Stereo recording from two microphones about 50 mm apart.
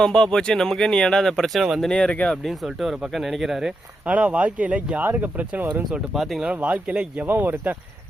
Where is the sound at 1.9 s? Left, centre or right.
Centre.